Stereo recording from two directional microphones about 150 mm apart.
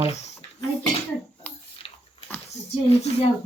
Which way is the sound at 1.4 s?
10° left (ahead or behind).